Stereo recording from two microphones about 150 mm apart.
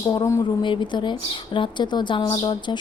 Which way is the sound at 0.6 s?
30° left (ahead or behind).